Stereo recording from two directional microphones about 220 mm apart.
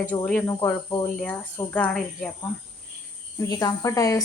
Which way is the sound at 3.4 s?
15° left (ahead or behind).